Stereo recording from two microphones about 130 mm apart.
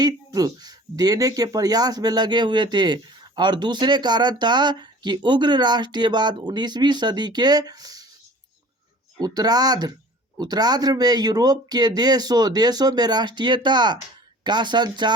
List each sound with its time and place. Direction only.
0.0 s speech: 30° right (ahead or behind)
9.2 s speech: 30° right (ahead or behind)